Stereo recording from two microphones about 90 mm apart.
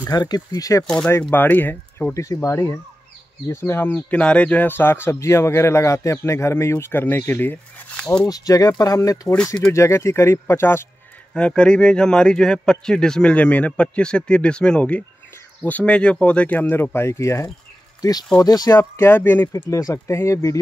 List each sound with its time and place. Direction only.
0.0 s speech: 50° left (ahead or behind)
0.8 s speech: 5° left (ahead or behind)
1.3 s speech: 20° left (ahead or behind)
2.1 s speech: 35° left (ahead or behind)
7.9 s speech: 10° left (ahead or behind)
8.3 s speech: 40° left (ahead or behind)
11.3 s speech: 10° left (ahead or behind); by 17.5 s 30° left (ahead or behind)
18.4 s speech: 45° left (ahead or behind)
18.8 s speech: 25° left (ahead or behind)
19.5 s speech: 40° left (ahead or behind)